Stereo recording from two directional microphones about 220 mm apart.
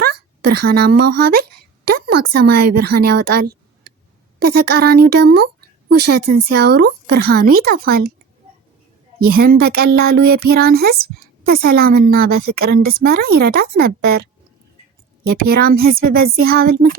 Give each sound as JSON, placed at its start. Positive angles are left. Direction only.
{"t": 0.0, "sound": "a sound", "side_deg": -45}
{"t": 1.0, "sound": "a woman's voice", "side_deg": -45}
{"t": 9.1, "sound": "a woman's voice", "side_deg": -45}